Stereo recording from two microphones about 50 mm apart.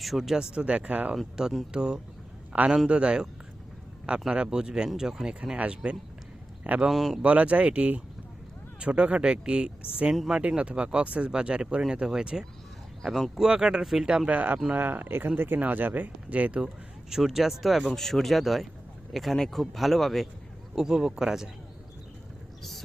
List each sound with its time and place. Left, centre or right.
0.0 s speech: centre
0.5 s speech: right
1.4 s speech: centre
4.3 s speech: centre
5.5 s speech: right
6.9 s speech: centre
7.2 s speech: right
10.2 s speech: centre
10.6 s speech: right
13.0 s speech: centre
14.3 s speech: right
17.1 s speech: centre
17.9 s speech: centre
20.7 s speech: centre